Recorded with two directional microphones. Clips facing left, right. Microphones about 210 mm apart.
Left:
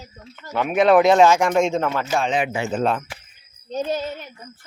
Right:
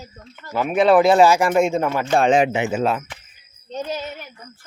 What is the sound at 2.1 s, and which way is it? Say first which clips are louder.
Speech: right 8 dB; 50° right (ahead or behind).